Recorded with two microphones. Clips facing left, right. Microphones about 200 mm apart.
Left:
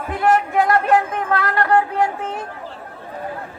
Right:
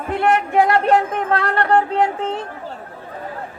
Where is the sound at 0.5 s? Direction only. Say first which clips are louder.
Right 1 dB; 30° right (ahead or behind).